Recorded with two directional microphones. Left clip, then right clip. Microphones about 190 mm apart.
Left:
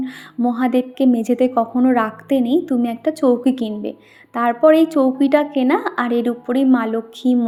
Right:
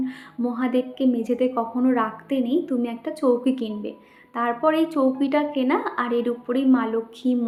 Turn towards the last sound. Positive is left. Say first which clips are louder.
# left 5 dB
turn(degrees=35)  # may be behind; listen again after turning